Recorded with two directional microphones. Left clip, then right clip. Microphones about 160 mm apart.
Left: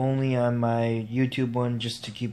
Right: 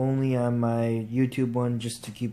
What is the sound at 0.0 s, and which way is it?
Speech, 5° right (ahead or behind).